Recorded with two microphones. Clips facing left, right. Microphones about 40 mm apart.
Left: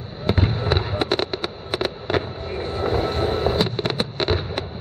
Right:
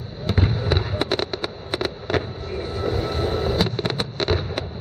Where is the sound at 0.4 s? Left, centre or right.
Centre.